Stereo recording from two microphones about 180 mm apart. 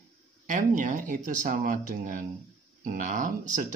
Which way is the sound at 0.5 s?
45° right (ahead or behind).